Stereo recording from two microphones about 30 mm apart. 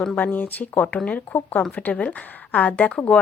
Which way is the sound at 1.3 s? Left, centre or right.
Left.